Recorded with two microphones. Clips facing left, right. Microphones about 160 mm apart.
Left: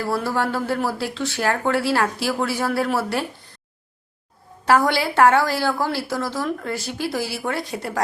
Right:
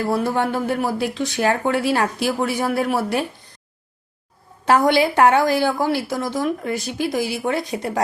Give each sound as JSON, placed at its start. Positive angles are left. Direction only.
{"t": 0.0, "sound": "a woman's voice", "side_deg": -20}
{"t": 4.6, "sound": "a woman's voice", "side_deg": -20}